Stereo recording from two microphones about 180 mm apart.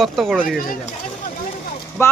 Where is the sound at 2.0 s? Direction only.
15° left (ahead or behind).